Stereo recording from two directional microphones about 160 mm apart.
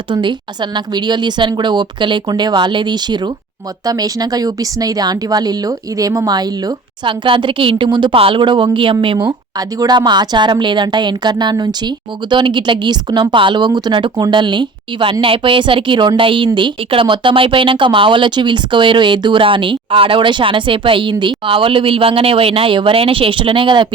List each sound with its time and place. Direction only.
0.1 s speech: 30° right (ahead or behind)